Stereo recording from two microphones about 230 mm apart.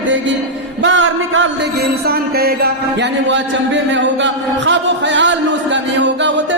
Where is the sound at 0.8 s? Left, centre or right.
Right.